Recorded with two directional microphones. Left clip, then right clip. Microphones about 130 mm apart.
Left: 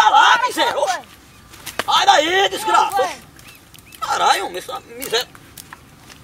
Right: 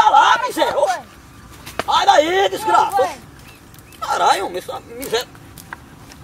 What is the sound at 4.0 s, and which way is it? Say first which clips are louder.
Speech: right 1 dB; 5° left (ahead or behind).